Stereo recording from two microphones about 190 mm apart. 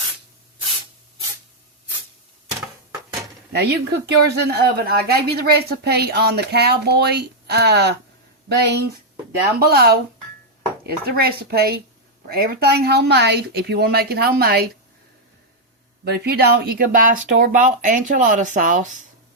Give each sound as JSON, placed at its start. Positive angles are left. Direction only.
{"t": 3.5, "sound": "speech", "side_deg": -60}
{"t": 16.0, "sound": "speech", "side_deg": -55}